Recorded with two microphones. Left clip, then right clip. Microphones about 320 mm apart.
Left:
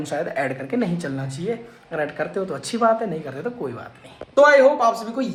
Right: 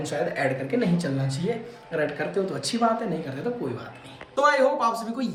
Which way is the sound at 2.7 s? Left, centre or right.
Left.